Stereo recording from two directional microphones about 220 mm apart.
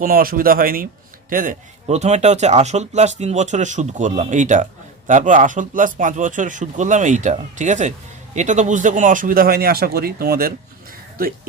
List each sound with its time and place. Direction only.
0.0 s a man's voice: 40° right (ahead or behind)